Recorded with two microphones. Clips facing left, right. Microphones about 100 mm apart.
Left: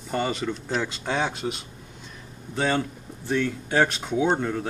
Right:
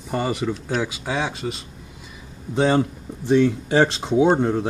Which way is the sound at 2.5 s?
25° right (ahead or behind).